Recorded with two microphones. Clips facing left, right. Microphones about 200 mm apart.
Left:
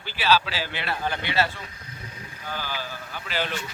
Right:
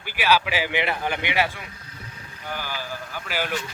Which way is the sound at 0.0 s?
15° right (ahead or behind).